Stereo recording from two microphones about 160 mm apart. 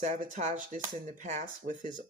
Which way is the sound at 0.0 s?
50° right (ahead or behind).